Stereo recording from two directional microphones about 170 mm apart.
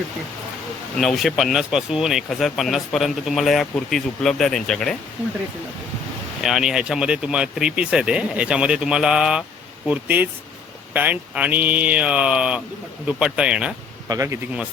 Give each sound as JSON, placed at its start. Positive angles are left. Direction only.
{"t": 0.9, "sound": "speech", "side_deg": 0}
{"t": 6.4, "sound": "speech", "side_deg": 0}
{"t": 14.1, "sound": "speech", "side_deg": -20}